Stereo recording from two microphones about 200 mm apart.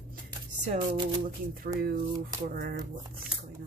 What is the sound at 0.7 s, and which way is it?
Speech, 25° right (ahead or behind).